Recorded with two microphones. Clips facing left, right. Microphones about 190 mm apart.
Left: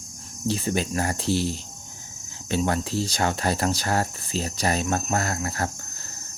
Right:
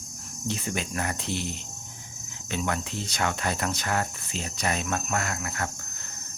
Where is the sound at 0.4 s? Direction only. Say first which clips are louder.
Left 6 dB; 35° left (ahead or behind).